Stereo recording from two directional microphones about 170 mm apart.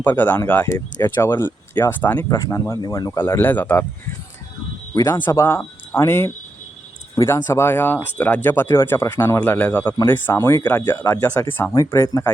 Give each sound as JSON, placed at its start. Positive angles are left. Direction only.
{"t": 0.0, "sound": "speech", "side_deg": 10}
{"t": 4.9, "sound": "speech", "side_deg": 20}